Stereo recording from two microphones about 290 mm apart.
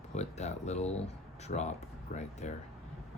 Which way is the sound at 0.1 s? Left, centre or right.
Left.